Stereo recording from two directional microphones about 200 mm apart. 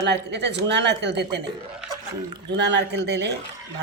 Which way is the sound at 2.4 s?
60° right (ahead or behind).